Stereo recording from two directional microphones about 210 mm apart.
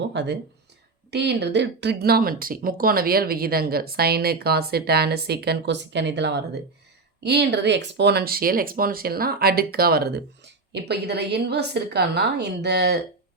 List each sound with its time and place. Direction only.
0.0 s speech: 55° right (ahead or behind)